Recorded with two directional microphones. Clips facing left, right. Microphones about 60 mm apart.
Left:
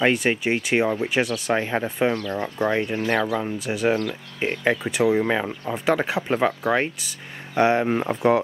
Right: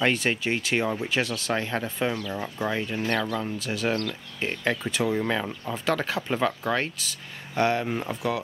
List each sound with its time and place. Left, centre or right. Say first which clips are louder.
0.0 s speech: left 4 dB; centre
2.1 s speech: left 5 dB; centre
2.6 s speech: left 5 dB; centre
3.3 s speech: left 4 dB; centre